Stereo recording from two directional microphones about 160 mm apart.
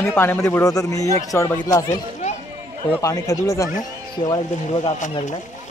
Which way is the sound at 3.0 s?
20° left (ahead or behind).